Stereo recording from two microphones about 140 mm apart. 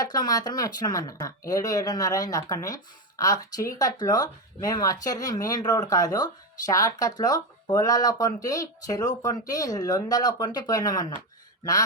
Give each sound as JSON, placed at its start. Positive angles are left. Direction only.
{"t": 0.0, "sound": "speech", "side_deg": 25}